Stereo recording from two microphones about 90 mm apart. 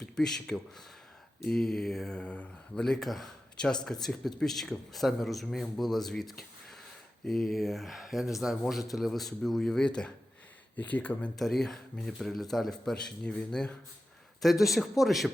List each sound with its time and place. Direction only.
0.0 s a man's voice: 5° left (ahead or behind)
11.3 s a man's voice: 5° left (ahead or behind)
14.6 s a man's voice: centre (ahead or behind)